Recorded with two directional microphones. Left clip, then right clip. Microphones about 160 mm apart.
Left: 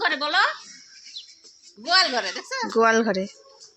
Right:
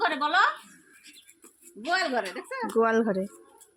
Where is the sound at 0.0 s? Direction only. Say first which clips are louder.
Left 2 dB; 90° right.